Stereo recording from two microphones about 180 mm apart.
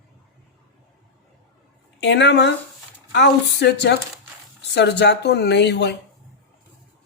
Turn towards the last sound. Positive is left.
turn(degrees=70)  # may be behind; listen again after turning